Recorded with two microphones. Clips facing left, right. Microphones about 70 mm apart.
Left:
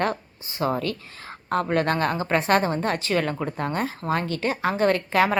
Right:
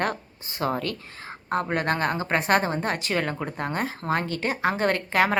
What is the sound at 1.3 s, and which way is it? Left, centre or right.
A woman's voice, right.